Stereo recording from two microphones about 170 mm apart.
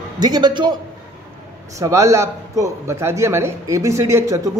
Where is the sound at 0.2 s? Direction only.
25° right (ahead or behind).